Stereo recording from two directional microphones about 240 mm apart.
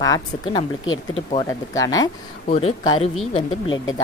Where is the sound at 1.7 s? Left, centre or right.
Centre.